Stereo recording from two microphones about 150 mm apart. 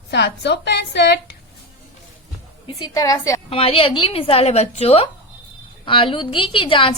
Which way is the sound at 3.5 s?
40° left (ahead or behind).